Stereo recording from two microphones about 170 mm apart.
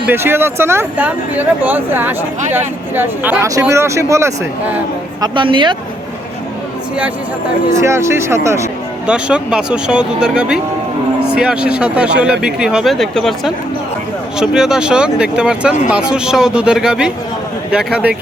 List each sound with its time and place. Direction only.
0.1 s speech: 15° right (ahead or behind)
5.2 s speech: 30° right (ahead or behind)
7.8 s speech: 15° right (ahead or behind)
9.0 s speech: 5° right (ahead or behind)